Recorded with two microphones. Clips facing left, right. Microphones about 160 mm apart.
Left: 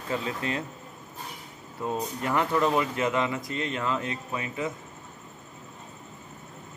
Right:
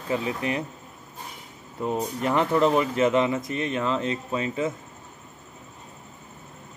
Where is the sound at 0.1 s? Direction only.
20° right (ahead or behind).